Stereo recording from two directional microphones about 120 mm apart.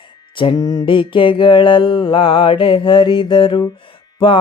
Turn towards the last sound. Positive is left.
turn(degrees=45)  # may be behind; listen again after turning